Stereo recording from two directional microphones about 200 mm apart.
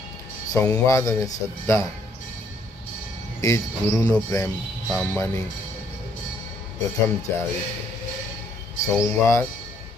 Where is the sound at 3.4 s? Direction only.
15° left (ahead or behind).